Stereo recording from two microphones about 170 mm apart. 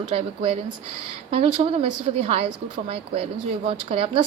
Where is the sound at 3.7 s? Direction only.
35° right (ahead or behind).